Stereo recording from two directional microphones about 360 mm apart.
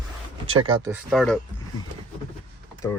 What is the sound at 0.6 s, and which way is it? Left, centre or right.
Speech, centre.